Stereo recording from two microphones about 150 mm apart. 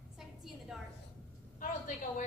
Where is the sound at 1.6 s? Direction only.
55° left (ahead or behind).